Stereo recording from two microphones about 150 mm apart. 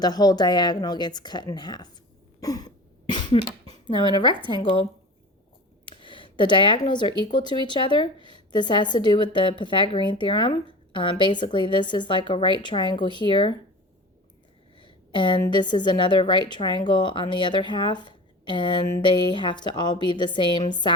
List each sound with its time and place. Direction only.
0.0 s speech: 25° left (ahead or behind)
2.4 s throat clearing: 25° left (ahead or behind)
4.4 s a woman's voice: 35° left (ahead or behind)
5.8 s a sound: 35° left (ahead or behind)
7.3 s a woman's voice: 30° left (ahead or behind)
14.8 s a woman's voice: 30° left (ahead or behind)